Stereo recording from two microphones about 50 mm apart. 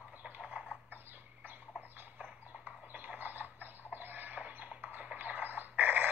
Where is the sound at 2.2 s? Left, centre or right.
Right.